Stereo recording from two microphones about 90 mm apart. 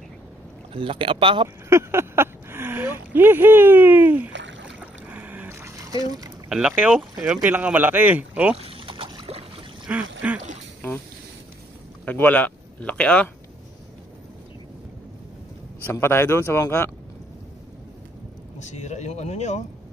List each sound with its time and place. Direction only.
0.7 s speech: 80° right
1.7 s speech: 30° right (ahead or behind)
4.7 s boat: 15° right (ahead or behind)
5.5 s a sound: 35° right (ahead or behind)
6.8 s speech: 10° right (ahead or behind)
8.6 s boat: 85° right
9.8 s duck: 15° right (ahead or behind)
10.8 s speech: 25° left (ahead or behind)
15.8 s speech: 30° left (ahead or behind)